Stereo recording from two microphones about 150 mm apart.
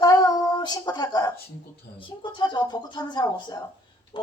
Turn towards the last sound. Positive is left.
turn(degrees=30)  # may be behind; listen again after turning